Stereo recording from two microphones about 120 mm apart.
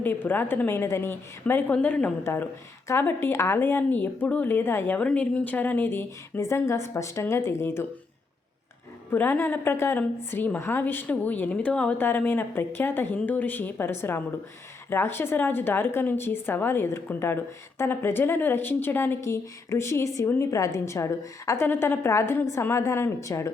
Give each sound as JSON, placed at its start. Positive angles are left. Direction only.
{"t": 0.0, "sound": "a woman's voice", "side_deg": 15}
{"t": 9.0, "sound": "a woman's voice", "side_deg": 15}